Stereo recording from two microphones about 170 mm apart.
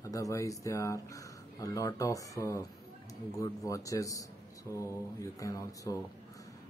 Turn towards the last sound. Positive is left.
turn(degrees=20)  # may be behind; listen again after turning